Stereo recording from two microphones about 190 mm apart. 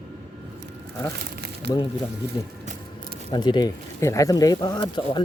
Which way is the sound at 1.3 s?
60° right (ahead or behind).